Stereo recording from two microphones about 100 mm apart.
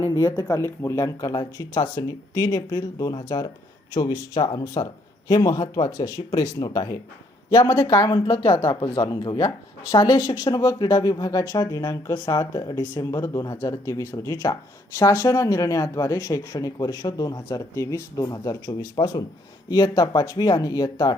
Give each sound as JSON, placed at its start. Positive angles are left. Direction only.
{"t": 0.1, "sound": "speech", "side_deg": 35}